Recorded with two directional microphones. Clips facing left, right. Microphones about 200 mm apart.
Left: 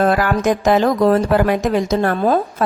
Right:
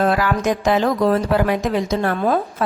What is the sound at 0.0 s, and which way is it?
A woman's voice, 45° left (ahead or behind).